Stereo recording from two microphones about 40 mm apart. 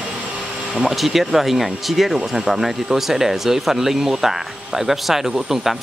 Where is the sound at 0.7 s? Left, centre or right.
Centre.